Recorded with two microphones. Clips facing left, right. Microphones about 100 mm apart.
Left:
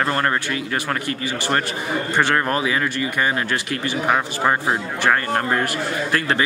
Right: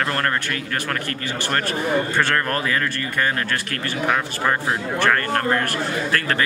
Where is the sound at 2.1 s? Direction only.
15° left (ahead or behind).